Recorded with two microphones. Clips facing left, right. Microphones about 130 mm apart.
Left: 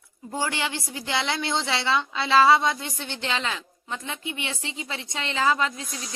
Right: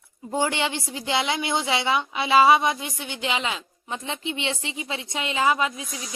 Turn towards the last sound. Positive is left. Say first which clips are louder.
# right 1 dB
turn(degrees=-15)  # may be behind; listen again after turning